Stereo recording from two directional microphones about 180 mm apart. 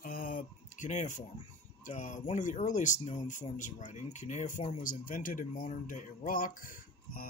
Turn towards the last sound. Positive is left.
turn(degrees=50)  # may be behind; listen again after turning